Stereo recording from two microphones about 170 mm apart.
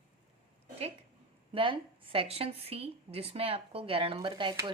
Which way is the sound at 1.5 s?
30° right (ahead or behind).